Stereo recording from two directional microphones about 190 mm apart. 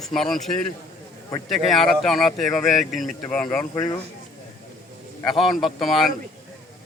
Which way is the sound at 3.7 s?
20° left (ahead or behind).